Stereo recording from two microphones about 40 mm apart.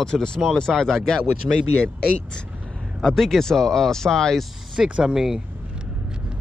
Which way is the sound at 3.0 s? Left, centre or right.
Centre.